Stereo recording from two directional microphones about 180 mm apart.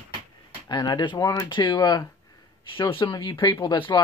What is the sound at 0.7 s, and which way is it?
Speech, 25° left (ahead or behind).